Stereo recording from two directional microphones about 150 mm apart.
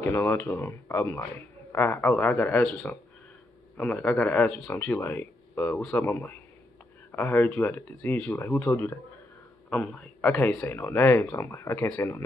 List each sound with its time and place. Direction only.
0.0 s speech: 15° left (ahead or behind)